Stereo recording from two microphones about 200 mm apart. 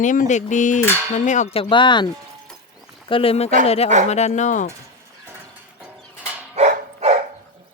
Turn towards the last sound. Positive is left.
turn(degrees=-35)  # may be behind; listen again after turning